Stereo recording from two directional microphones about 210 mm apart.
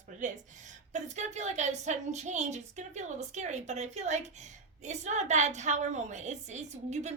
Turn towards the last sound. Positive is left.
turn(degrees=-35)  # may be behind; listen again after turning